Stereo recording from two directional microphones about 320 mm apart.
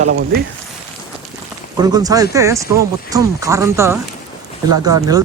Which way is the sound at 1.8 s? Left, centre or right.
Centre.